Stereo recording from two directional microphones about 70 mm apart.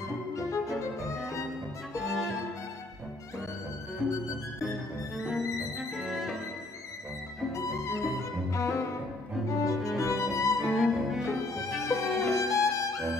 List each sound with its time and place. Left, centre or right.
0.3 s music: left
2.0 s music: centre
4.0 s music: centre
8.2 s music: left
10.6 s music: centre
12.4 s music: left